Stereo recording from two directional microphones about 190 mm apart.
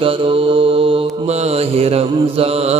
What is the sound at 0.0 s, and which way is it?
Mantra, 30° right (ahead or behind).